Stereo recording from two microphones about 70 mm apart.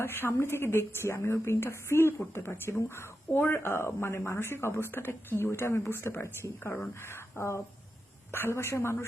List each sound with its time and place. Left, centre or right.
0.0 s a woman's voice: left